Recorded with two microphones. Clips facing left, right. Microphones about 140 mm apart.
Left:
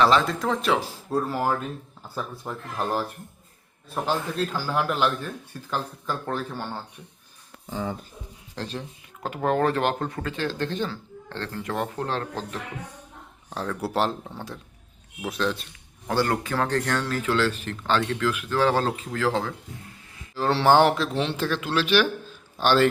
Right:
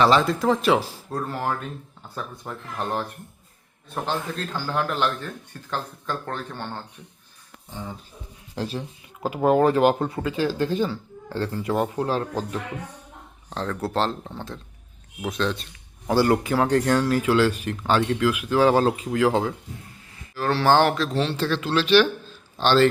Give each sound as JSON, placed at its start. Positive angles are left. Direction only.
{"t": 0.0, "sound": "speech", "side_deg": 0}
{"t": 8.5, "sound": "speech", "side_deg": -5}
{"t": 13.5, "sound": "speech", "side_deg": 10}
{"t": 16.0, "sound": "speech", "side_deg": -10}
{"t": 20.3, "sound": "speech", "side_deg": 25}